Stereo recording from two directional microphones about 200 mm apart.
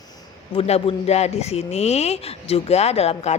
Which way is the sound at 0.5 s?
25° left (ahead or behind).